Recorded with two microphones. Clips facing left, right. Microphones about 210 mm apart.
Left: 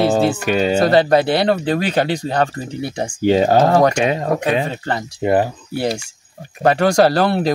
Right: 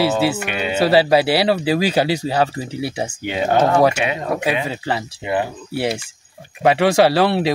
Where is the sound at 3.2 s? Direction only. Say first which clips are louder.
Left 5 dB; 40° left (ahead or behind).